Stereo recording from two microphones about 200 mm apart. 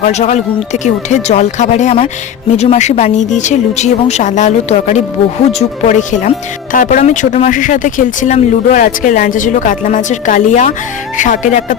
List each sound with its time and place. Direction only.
0.0 s speech: 35° left (ahead or behind)